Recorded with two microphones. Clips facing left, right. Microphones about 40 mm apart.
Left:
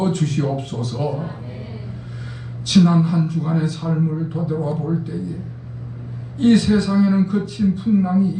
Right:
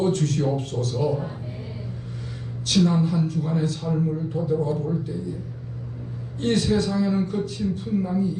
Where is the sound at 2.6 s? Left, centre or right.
Left.